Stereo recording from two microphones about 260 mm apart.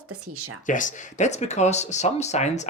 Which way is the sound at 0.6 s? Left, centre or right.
Left.